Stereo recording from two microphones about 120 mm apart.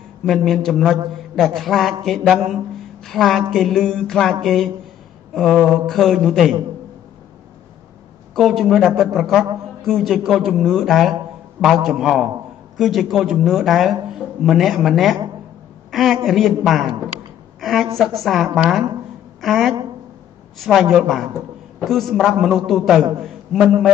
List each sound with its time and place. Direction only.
0.2 s speech: centre (ahead or behind)
8.4 s a woman's voice: centre (ahead or behind)